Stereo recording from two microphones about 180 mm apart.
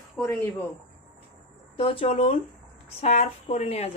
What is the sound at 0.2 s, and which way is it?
Speech, 5° left (ahead or behind).